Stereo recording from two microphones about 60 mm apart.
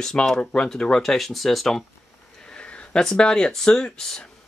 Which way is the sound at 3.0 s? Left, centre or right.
Centre.